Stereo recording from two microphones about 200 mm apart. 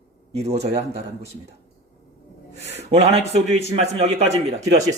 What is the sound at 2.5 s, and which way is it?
A man's voice, 35° right (ahead or behind).